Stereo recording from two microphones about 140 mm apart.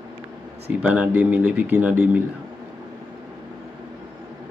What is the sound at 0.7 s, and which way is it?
Speech, 10° right (ahead or behind).